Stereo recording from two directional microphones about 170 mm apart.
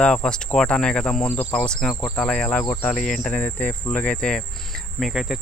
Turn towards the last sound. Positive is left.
turn(degrees=0)  # may be behind; listen again after turning